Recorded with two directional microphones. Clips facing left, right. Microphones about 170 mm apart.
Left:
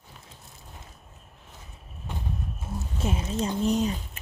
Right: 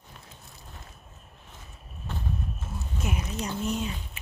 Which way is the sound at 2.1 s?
15° left (ahead or behind).